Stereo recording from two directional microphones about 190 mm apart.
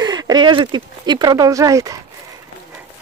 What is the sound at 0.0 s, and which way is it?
Speech, 20° right (ahead or behind).